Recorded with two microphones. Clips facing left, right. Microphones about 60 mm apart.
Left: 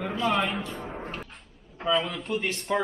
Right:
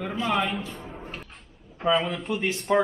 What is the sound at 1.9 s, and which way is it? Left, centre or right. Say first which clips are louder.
Speech: right 1 dB; centre.